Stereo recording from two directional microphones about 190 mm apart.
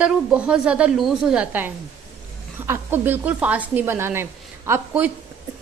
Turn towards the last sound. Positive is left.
turn(degrees=-10)  # may be behind; listen again after turning